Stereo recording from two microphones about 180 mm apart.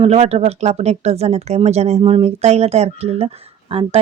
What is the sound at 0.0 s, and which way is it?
Speech, 35° right (ahead or behind).